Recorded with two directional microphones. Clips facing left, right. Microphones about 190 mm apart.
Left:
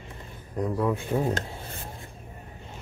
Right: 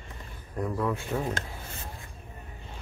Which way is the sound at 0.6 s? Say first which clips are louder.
Left 3 dB; 15° left (ahead or behind).